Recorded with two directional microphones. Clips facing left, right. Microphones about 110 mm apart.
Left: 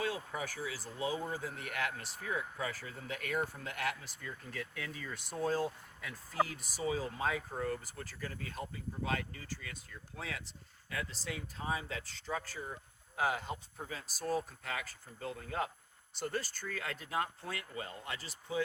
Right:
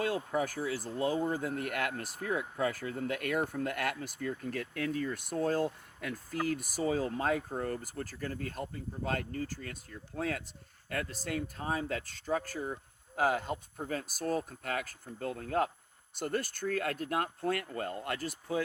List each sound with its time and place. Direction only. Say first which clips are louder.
0.3 s speech: right 8 dB; 45° right (ahead or behind)
6.7 s speech: right 2 dB; 50° right (ahead or behind)